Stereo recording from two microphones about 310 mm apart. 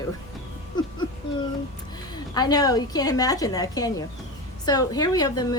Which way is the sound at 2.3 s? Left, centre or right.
Centre.